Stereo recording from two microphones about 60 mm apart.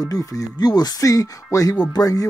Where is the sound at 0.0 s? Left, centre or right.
Left.